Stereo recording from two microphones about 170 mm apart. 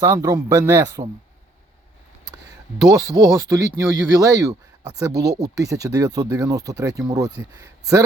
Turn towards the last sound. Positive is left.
turn(degrees=-20)  # may be behind; listen again after turning